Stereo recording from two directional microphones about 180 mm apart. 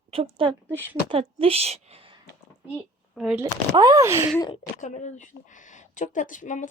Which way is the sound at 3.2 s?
5° right (ahead or behind).